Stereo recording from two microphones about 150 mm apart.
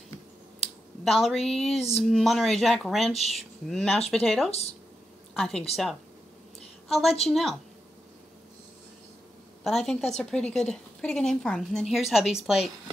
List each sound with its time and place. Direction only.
1.0 s speech: centre (ahead or behind)
3.1 s speech: 45° left (ahead or behind)
3.7 s speech: 5° left (ahead or behind)
4.5 s speech: 45° left (ahead or behind)
5.3 s a woman's voice: 5° left (ahead or behind)
6.9 s a woman's voice: centre (ahead or behind)
9.8 s speech: 5° left (ahead or behind)